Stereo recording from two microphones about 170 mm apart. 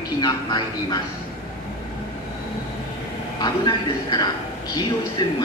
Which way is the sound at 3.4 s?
25° left (ahead or behind).